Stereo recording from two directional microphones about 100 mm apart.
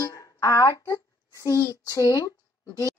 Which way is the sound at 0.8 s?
30° left (ahead or behind).